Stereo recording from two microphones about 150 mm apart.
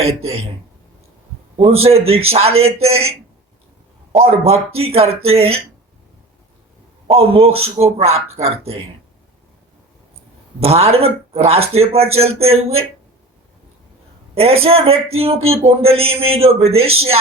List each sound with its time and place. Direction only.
0.0 s speech: 45° right (ahead or behind)
1.5 s a man's voice: 40° right (ahead or behind)
7.1 s a man's voice: 40° right (ahead or behind)
10.6 s speech: 45° right (ahead or behind)
14.3 s a man's voice: 40° right (ahead or behind)